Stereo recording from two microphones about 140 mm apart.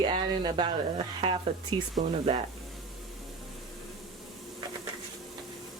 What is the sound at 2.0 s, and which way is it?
Speech, 65° right (ahead or behind).